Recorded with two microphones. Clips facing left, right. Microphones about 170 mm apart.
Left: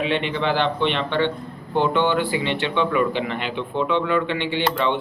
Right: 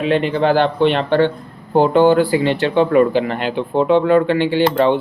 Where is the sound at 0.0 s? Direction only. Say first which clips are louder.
Right 7 dB; 40° right (ahead or behind).